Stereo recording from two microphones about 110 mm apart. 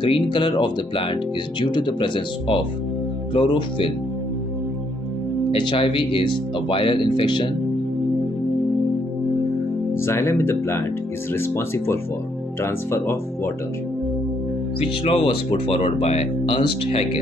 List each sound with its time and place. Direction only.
0.0 s speech: 45° left (ahead or behind)
5.5 s speech: 50° left (ahead or behind)
9.9 s speech: 25° left (ahead or behind)
14.8 s speech: 55° left (ahead or behind)